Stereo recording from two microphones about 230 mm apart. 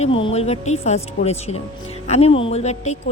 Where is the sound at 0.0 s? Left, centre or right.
Left.